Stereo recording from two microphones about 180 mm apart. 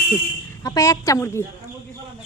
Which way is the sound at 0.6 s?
20° left (ahead or behind).